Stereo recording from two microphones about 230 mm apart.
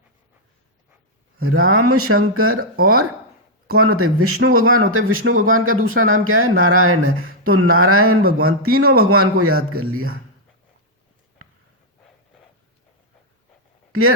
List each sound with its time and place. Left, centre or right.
1.4 s speech: right
2.7 s speech: right
3.7 s speech: right
8.2 s speech: right
8.4 s speech: right